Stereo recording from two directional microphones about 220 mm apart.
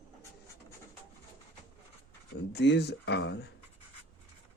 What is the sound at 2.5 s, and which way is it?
Speech, 50° left (ahead or behind).